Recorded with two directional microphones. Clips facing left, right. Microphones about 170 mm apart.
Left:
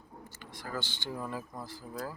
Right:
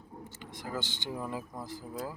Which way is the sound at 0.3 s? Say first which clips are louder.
Right 1 dB; 20° right (ahead or behind).